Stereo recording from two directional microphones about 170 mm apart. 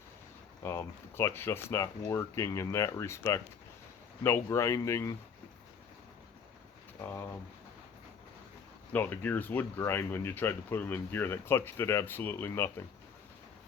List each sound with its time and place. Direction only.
0.6 s speech: 15° left (ahead or behind)
8.9 s speech: 10° left (ahead or behind)